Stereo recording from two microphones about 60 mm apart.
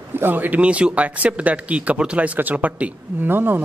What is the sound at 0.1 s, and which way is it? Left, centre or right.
Speech, right.